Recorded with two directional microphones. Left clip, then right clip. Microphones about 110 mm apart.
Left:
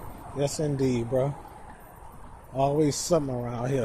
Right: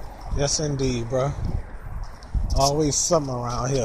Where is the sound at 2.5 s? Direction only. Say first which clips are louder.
Right 3 dB; 65° left (ahead or behind); by 3.8 s 50° left (ahead or behind).